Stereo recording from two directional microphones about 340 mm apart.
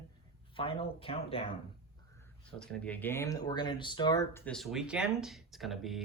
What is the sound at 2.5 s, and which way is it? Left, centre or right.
Speech, centre.